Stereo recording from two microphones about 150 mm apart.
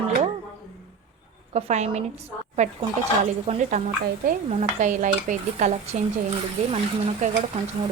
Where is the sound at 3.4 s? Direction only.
50° right (ahead or behind).